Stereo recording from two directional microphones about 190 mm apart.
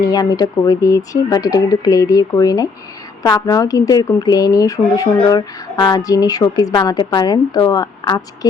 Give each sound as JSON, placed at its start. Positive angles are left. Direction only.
{"t": 0.0, "sound": "speech", "side_deg": 20}